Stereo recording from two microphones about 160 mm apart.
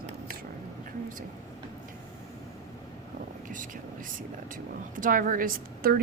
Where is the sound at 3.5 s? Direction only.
55° right (ahead or behind).